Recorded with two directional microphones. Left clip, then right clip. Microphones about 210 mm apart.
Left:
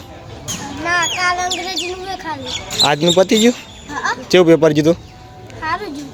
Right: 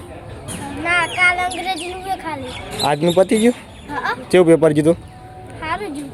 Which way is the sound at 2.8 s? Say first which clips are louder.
Left 2 dB; 10° left (ahead or behind).